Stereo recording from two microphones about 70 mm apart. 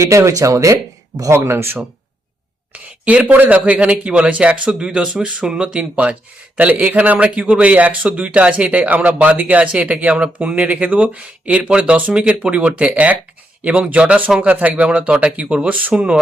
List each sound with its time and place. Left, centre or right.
0.0 s speech: right
2.7 s speech: centre